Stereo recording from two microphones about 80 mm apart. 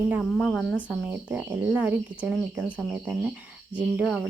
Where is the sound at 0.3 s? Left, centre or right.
Centre.